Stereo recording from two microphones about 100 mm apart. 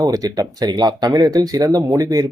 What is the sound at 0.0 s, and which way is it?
Speech, 40° right (ahead or behind).